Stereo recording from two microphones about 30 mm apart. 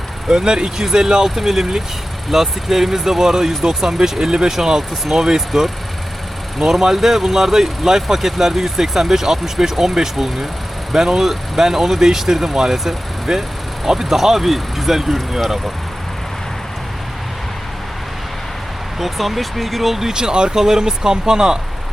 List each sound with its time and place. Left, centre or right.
0.3 s speech: right
5.5 s speech: centre
6.6 s speech: centre
18.9 s speech: centre; by 21.6 s right